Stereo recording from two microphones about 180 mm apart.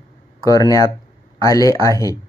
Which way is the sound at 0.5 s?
20° left (ahead or behind).